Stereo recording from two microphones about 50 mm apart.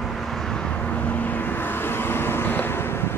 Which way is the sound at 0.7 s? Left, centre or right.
Left.